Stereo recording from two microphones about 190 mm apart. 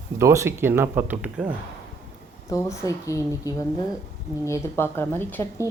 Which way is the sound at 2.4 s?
15° left (ahead or behind).